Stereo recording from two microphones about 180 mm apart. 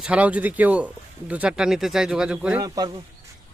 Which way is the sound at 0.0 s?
5° right (ahead or behind).